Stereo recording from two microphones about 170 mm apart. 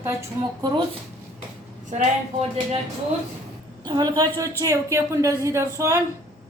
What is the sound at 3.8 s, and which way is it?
A woman's voice, 25° right (ahead or behind).